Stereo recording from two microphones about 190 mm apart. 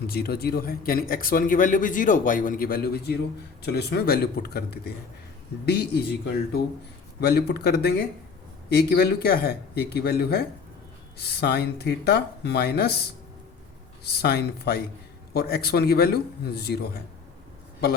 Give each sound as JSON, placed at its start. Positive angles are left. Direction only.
{"t": 0.1, "sound": "a man's voice", "side_deg": 55}
{"t": 14.0, "sound": "speech", "side_deg": 55}